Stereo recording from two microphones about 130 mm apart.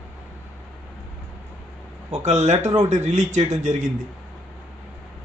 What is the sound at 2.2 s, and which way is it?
A man's voice, 65° right (ahead or behind).